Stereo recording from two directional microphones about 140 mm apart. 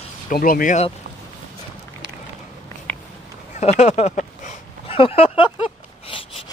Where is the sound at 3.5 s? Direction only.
50° left (ahead or behind).